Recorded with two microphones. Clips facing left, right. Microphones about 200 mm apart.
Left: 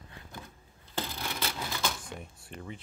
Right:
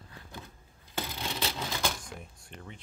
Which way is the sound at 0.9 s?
20° right (ahead or behind).